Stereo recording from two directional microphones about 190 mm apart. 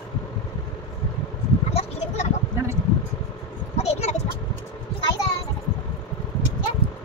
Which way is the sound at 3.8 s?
35° left (ahead or behind).